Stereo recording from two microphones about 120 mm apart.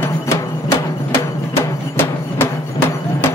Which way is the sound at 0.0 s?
20° left (ahead or behind).